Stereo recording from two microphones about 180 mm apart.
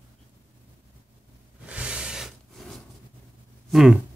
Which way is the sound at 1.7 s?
5° right (ahead or behind).